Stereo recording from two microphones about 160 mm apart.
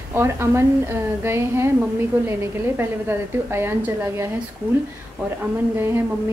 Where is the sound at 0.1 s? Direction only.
15° right (ahead or behind).